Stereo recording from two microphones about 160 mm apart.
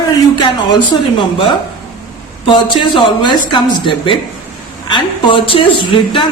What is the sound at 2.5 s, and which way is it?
Speech, 30° left (ahead or behind).